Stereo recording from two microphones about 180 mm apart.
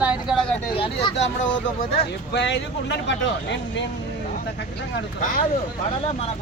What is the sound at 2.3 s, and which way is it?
Speech, 80° left.